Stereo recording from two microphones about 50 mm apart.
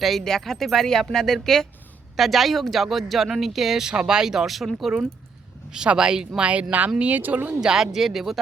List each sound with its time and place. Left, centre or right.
0.0 s speech: centre
5.7 s speech: centre
6.5 s speech: right
7.6 s speech: centre